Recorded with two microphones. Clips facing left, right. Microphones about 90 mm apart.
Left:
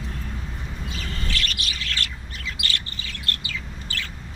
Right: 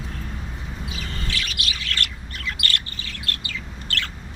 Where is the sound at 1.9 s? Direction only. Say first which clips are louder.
Right 2 dB; 55° right (ahead or behind).